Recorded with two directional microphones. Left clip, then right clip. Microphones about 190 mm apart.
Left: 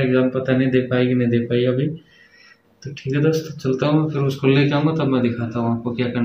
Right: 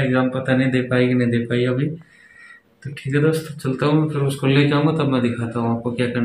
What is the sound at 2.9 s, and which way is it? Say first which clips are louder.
A man's voice: even; 5° right (ahead or behind).